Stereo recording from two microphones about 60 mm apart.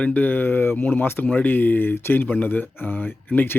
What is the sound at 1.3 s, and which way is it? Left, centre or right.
Speech, left.